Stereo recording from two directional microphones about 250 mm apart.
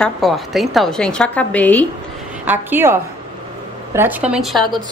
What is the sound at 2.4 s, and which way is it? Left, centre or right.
Speech, centre.